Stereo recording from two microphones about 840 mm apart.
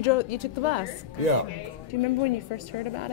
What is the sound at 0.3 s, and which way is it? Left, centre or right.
Speech, left.